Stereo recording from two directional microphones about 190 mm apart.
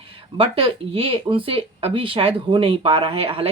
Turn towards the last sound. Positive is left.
turn(degrees=-30)  # may be behind; listen again after turning